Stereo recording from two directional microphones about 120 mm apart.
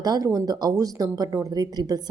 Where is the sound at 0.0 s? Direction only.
30° right (ahead or behind).